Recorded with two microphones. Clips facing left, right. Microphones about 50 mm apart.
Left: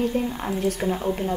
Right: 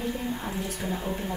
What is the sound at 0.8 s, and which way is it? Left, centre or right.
Speech, left.